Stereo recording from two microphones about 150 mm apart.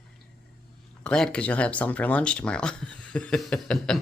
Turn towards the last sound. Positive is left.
turn(degrees=5)  # may be behind; listen again after turning